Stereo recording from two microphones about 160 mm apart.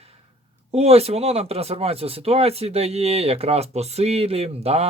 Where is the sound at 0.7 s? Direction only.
40° right (ahead or behind).